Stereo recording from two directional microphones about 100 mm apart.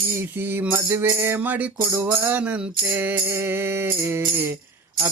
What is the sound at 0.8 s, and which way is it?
Music, 30° right (ahead or behind).